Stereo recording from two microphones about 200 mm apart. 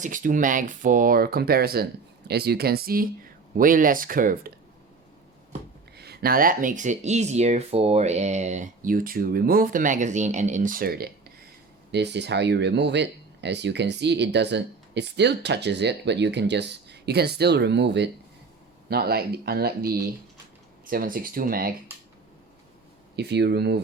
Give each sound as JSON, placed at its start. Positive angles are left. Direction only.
{"t": 0.0, "sound": "speech", "side_deg": -40}
{"t": 6.0, "sound": "speech", "side_deg": -55}
{"t": 23.1, "sound": "speech", "side_deg": -55}